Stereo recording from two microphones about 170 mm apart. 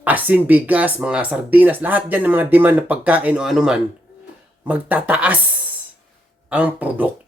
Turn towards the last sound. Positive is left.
turn(degrees=-10)  # may be behind; listen again after turning